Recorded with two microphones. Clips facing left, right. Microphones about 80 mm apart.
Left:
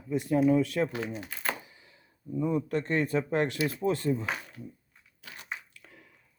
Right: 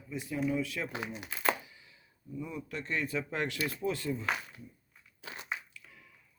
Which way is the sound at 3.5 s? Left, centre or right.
Left.